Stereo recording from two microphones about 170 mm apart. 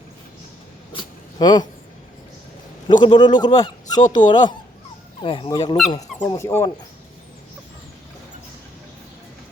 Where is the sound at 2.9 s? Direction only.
25° left (ahead or behind).